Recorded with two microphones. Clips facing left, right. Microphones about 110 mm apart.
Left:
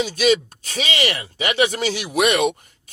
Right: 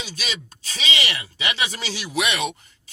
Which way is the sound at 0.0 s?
50° left (ahead or behind).